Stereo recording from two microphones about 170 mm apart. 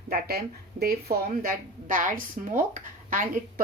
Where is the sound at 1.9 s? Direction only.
50° right (ahead or behind).